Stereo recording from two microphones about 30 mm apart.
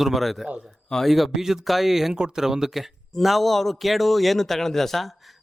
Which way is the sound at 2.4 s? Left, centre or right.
Centre.